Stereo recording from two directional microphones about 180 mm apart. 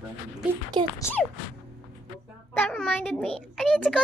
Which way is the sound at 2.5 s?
5° left (ahead or behind).